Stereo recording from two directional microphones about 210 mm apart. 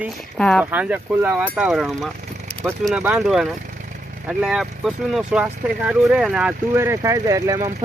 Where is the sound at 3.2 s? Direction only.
Centre (ahead or behind).